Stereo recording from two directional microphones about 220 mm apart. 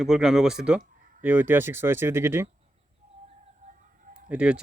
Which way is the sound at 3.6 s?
35° right (ahead or behind).